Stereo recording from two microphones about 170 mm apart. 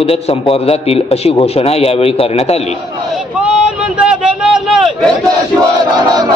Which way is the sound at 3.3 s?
5° right (ahead or behind).